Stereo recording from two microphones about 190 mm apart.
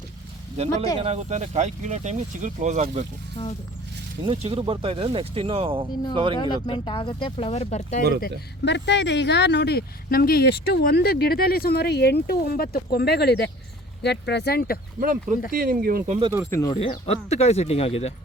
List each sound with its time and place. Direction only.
0.5 s speech: 35° right (ahead or behind)
3.4 s speech: 25° left (ahead or behind)
4.3 s speech: 30° right (ahead or behind)
6.3 s speech: 25° left (ahead or behind)
8.6 s speech: 65° left (ahead or behind)
15.0 s speech: 45° right (ahead or behind)
16.5 s speech: 15° left (ahead or behind)
16.7 s speech: 30° left (ahead or behind)